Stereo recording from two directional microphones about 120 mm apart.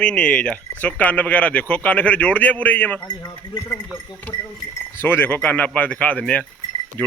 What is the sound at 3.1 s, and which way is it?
Speech, 35° left (ahead or behind).